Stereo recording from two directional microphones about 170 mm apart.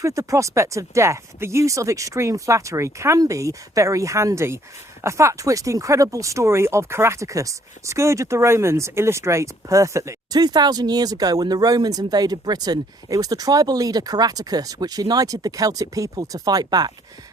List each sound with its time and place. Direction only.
0.0 s speech: 20° right (ahead or behind)